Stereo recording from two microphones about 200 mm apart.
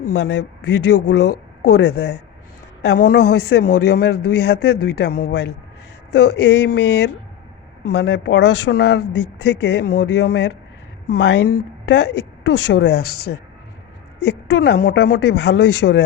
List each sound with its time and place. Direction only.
0.0 s speech: 60° left (ahead or behind)
14.2 s speech: 55° left (ahead or behind)